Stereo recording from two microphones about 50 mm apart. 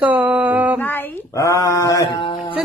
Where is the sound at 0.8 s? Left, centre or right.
Left.